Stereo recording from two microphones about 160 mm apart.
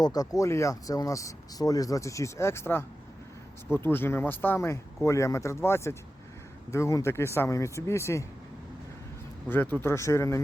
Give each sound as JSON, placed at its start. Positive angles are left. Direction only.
{"t": 0.0, "sound": "speech", "side_deg": 25}
{"t": 9.5, "sound": "speech", "side_deg": 10}